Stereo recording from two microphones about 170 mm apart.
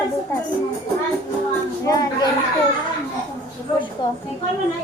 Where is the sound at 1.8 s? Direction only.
20° left (ahead or behind).